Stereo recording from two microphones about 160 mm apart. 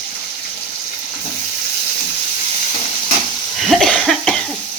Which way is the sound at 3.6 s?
Centre (ahead or behind).